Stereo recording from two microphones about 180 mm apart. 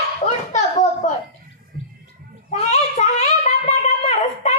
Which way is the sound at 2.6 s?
40° left (ahead or behind).